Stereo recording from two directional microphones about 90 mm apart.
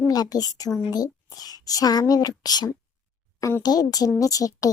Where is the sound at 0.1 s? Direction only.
45° left (ahead or behind).